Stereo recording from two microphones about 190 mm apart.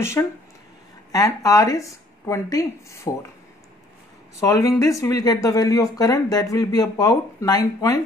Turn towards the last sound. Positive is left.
turn(degrees=20)  # may be behind; listen again after turning